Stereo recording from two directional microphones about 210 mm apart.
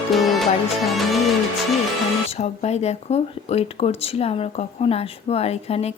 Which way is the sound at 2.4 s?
30° left (ahead or behind).